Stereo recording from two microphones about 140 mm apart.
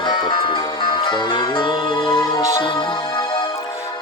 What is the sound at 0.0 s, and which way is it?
Music, 35° left (ahead or behind).